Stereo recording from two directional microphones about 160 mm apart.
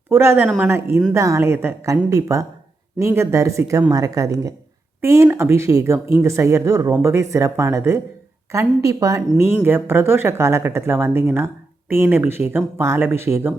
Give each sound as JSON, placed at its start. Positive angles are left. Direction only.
{"t": 0.1, "sound": "speech", "side_deg": -15}
{"t": 0.4, "sound": "speech", "side_deg": -5}
{"t": 0.7, "sound": "a woman's voice", "side_deg": -15}